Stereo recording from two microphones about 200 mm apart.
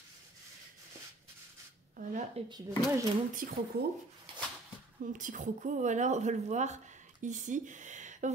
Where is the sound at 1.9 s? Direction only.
40° right (ahead or behind).